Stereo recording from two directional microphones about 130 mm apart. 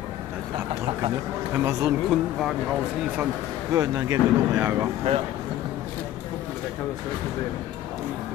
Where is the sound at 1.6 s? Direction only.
25° right (ahead or behind).